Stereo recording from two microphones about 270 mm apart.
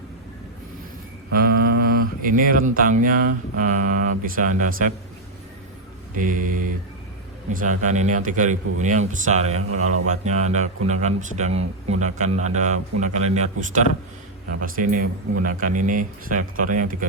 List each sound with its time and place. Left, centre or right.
1.3 s speech: right
6.1 s speech: right
9.6 s speech: right
10.1 s speech: right